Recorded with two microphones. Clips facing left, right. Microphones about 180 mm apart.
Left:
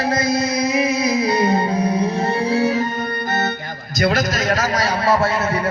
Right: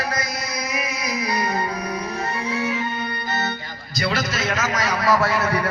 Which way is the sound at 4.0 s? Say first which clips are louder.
Left 5 dB; 45° left (ahead or behind).